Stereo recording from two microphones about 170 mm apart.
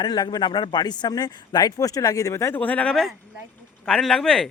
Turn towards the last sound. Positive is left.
turn(degrees=5)  # may be behind; listen again after turning